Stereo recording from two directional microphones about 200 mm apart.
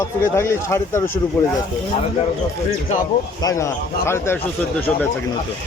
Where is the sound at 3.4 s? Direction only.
15° left (ahead or behind).